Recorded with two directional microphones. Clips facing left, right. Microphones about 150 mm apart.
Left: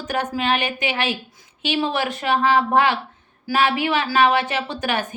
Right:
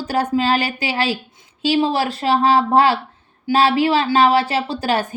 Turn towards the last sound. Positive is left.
turn(degrees=-35)  # may be behind; listen again after turning